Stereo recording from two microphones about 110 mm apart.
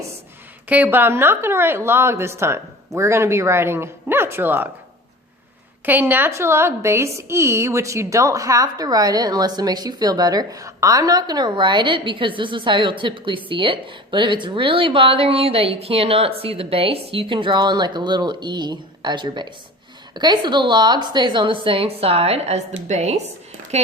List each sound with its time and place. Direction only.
0.7 s a woman's voice: 15° right (ahead or behind)
5.8 s a woman's voice: 15° right (ahead or behind); by 23.9 s 75° right (ahead or behind)